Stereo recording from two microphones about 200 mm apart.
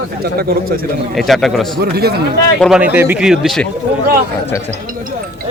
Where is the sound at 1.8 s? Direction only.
50° right (ahead or behind).